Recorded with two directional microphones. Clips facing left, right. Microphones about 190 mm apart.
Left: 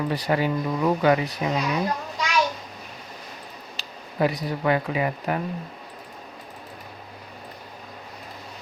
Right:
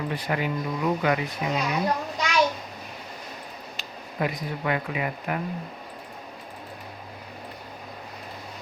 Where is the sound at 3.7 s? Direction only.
35° left (ahead or behind).